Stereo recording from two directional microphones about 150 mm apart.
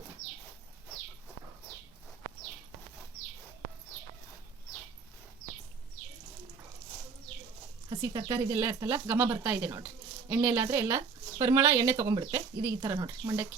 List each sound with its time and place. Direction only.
7.9 s speech: 30° right (ahead or behind)
8.5 s speech: 15° right (ahead or behind)